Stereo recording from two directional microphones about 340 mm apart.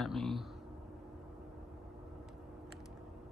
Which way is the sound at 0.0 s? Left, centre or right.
Centre.